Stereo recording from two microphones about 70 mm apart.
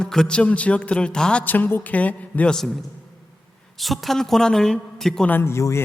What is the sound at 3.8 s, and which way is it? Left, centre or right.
A woman's voice, centre.